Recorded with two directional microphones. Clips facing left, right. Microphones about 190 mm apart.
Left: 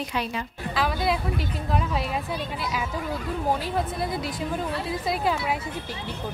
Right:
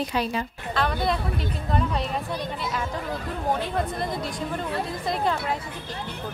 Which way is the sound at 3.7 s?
5° left (ahead or behind).